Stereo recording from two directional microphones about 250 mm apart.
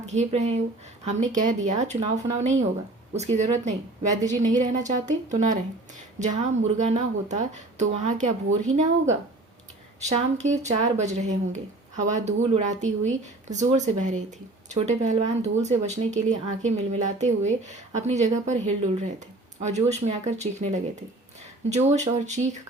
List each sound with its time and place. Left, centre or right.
0.1 s speech: right
10.0 s speech: right